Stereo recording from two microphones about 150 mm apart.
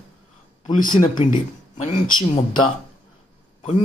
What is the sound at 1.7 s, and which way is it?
Speech, 50° left (ahead or behind).